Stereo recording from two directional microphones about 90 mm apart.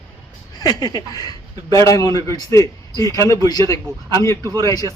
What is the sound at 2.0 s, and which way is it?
Speech, 55° right (ahead or behind).